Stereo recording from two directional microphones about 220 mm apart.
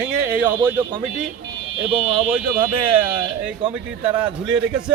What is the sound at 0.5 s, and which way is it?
Speech, 20° right (ahead or behind).